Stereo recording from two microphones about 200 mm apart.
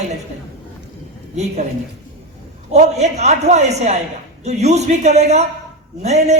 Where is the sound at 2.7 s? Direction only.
35° right (ahead or behind).